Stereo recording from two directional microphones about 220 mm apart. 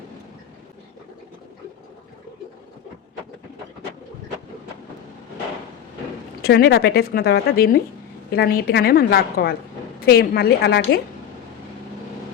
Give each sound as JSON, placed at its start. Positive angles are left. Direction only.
{"t": 6.4, "sound": "a woman's voice", "side_deg": 45}